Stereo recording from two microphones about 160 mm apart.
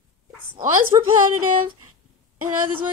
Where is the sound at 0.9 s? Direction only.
25° right (ahead or behind).